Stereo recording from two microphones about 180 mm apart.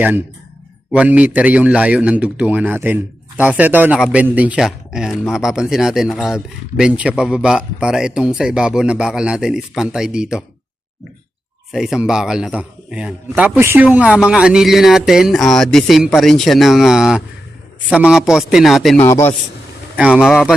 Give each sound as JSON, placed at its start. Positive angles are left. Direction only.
{"t": 0.0, "sound": "a man's voice", "side_deg": -10}
{"t": 11.7, "sound": "speech", "side_deg": 0}
{"t": 19.0, "sound": "a man's voice", "side_deg": 15}
{"t": 20.0, "sound": "speech", "side_deg": -5}